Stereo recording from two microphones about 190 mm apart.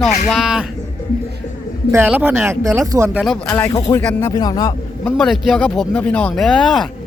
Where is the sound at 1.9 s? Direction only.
10° right (ahead or behind).